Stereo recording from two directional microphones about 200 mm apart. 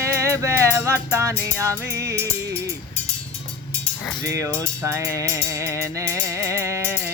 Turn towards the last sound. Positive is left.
turn(degrees=-10)  # may be behind; listen again after turning